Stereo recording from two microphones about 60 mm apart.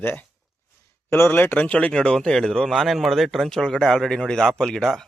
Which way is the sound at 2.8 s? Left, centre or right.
Centre.